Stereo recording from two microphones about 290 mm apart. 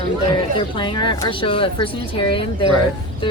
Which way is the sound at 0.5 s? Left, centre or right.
Centre.